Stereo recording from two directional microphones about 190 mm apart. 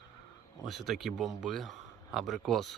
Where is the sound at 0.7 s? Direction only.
Centre (ahead or behind).